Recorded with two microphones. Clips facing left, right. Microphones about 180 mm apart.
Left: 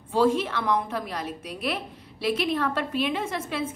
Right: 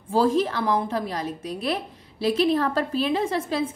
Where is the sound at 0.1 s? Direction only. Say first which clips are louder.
Right 2 dB; 35° right (ahead or behind).